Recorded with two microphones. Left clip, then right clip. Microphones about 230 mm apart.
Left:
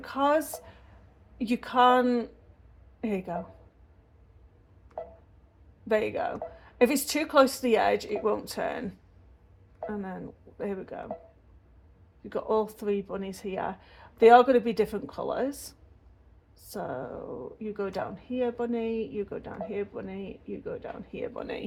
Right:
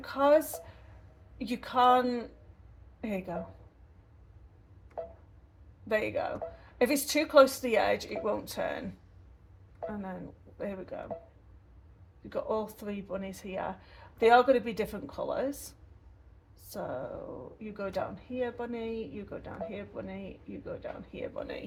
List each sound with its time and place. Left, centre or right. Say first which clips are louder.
0.0 s a woman's voice: right 1 dB; left
1.5 s a woman's voice: left 3 dB; left
5.9 s a woman's voice: left 3 dB; left
10.6 s a woman's voice: left 3 dB; left
12.3 s a woman's voice: left 5 dB; left
16.7 s a woman's voice: left 2 dB; left